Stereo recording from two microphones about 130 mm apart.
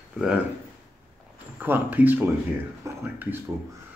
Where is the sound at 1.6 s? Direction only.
15° right (ahead or behind).